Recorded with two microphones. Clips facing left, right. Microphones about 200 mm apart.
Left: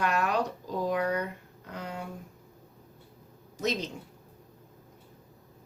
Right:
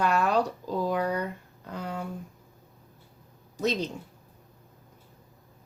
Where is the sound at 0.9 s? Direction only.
30° right (ahead or behind).